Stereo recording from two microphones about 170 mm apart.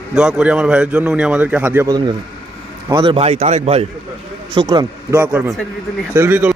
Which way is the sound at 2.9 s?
30° right (ahead or behind).